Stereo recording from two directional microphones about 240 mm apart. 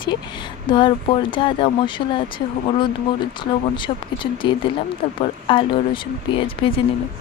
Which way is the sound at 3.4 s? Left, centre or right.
Centre.